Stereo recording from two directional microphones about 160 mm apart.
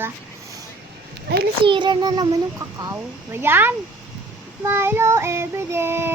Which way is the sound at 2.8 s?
15° right (ahead or behind).